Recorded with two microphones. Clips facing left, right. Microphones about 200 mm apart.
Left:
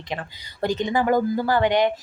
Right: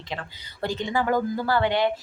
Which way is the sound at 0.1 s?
15° left (ahead or behind).